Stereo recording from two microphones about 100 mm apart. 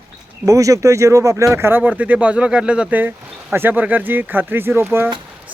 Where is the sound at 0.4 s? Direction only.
35° right (ahead or behind).